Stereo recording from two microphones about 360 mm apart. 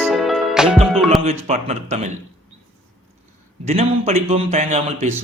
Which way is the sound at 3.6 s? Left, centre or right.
Centre.